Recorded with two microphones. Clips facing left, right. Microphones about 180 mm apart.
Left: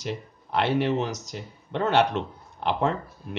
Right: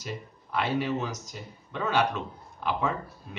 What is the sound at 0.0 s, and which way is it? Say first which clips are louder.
Speech: left 5 dB; 70° left (ahead or behind).